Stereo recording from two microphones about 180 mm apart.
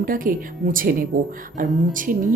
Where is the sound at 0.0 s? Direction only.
50° right (ahead or behind).